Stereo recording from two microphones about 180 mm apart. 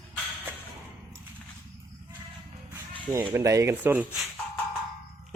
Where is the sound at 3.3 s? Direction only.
15° right (ahead or behind).